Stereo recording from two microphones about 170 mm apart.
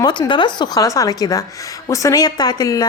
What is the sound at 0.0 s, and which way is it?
A woman's voice, 25° left (ahead or behind).